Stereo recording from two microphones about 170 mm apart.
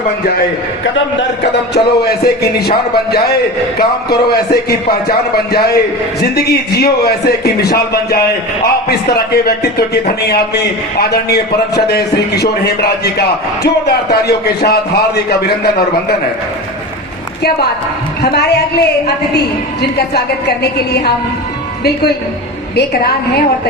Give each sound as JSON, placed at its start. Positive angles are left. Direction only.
{"t": 1.7, "sound": "a man's voice", "side_deg": 70}
{"t": 18.2, "sound": "speech", "side_deg": 75}
{"t": 22.7, "sound": "speech", "side_deg": 70}